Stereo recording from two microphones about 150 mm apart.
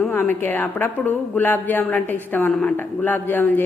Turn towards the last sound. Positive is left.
turn(degrees=15)  # may be behind; listen again after turning